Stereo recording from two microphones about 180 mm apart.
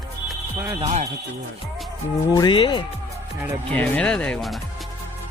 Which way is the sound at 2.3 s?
25° left (ahead or behind).